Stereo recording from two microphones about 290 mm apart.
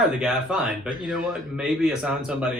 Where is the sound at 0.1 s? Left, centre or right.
Centre.